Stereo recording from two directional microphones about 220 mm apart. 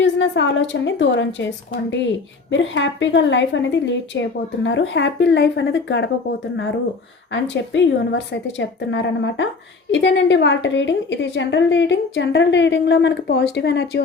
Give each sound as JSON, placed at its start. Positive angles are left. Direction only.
{"t": 0.0, "sound": "a woman's voice", "side_deg": 55}
{"t": 2.5, "sound": "a woman's voice", "side_deg": 55}
{"t": 7.5, "sound": "a woman's voice", "side_deg": 55}